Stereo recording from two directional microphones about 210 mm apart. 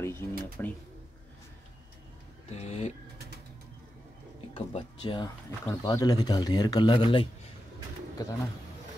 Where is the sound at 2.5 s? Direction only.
30° left (ahead or behind).